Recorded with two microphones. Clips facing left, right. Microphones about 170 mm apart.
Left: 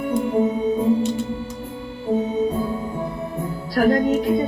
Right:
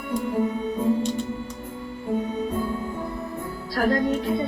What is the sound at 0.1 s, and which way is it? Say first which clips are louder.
Music: left 4 dB; 25° left (ahead or behind).